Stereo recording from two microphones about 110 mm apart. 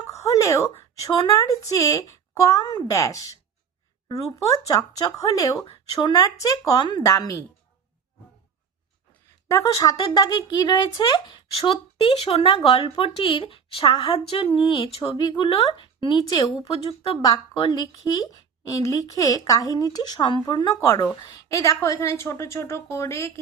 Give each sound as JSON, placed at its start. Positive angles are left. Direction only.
{"t": 0.0, "sound": "a sound", "side_deg": 30}
{"t": 1.3, "sound": "speech", "side_deg": 30}
{"t": 9.5, "sound": "a woman's voice", "side_deg": 30}
{"t": 10.0, "sound": "speech", "side_deg": 40}
{"t": 11.6, "sound": "a woman's voice", "side_deg": 55}
{"t": 16.6, "sound": "a woman's voice", "side_deg": 60}
{"t": 17.7, "sound": "speech", "side_deg": 35}
{"t": 20.7, "sound": "a woman's voice", "side_deg": 30}